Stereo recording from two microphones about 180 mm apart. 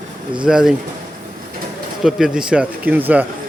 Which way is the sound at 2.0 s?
Centre (ahead or behind).